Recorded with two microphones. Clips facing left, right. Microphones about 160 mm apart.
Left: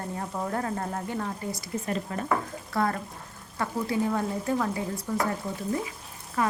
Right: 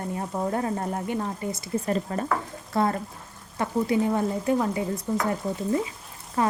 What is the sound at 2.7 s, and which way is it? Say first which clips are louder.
A woman's voice: right 3 dB; 25° right (ahead or behind).